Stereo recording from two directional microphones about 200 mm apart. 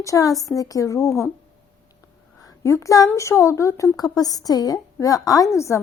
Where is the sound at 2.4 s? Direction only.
15° left (ahead or behind).